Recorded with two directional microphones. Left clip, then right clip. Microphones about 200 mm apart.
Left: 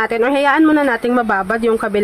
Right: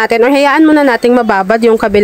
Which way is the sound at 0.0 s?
30° right (ahead or behind).